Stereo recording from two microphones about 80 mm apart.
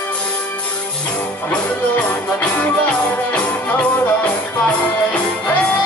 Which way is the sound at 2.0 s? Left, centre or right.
Centre.